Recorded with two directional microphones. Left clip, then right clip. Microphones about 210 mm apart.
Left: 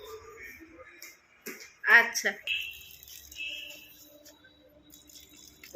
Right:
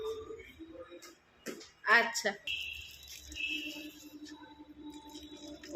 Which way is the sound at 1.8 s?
Centre (ahead or behind).